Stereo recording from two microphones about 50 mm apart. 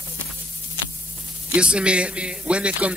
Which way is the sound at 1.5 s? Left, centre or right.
Right.